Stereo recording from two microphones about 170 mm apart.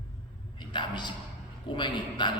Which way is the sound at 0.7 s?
25° left (ahead or behind).